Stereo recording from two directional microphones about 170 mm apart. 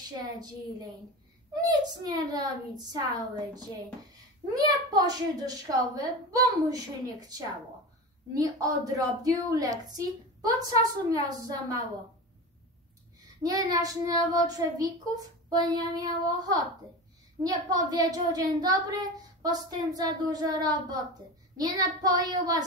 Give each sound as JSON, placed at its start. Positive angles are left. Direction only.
{"t": 1.5, "sound": "speech", "side_deg": -25}
{"t": 13.4, "sound": "speech", "side_deg": -20}